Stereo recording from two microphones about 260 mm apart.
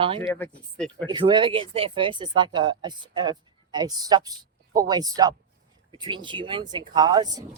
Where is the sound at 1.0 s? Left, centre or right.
Centre.